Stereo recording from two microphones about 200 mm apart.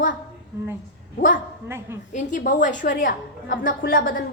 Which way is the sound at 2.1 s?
40° left (ahead or behind).